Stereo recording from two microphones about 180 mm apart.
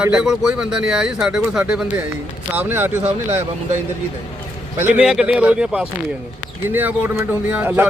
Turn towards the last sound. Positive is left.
turn(degrees=-10)  # may be behind; listen again after turning